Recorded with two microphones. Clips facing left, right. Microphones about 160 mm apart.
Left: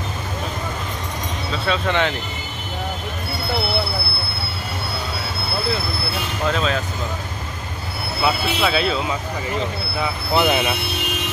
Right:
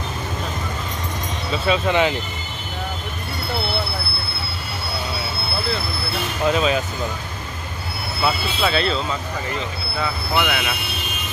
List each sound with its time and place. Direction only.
1.7 s speech: 10° right (ahead or behind)
6.4 s speech: 10° right (ahead or behind)
8.2 s speech: 5° left (ahead or behind)
10.3 s speech: 30° left (ahead or behind)